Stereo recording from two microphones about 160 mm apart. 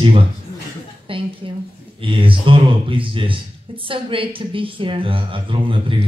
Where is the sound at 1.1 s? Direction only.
35° right (ahead or behind).